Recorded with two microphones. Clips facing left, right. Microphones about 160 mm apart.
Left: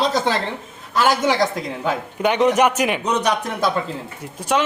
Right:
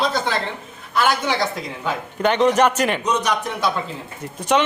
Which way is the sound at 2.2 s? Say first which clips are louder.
Even; 10° left (ahead or behind).